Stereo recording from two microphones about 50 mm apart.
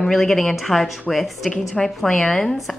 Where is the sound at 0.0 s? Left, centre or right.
Centre.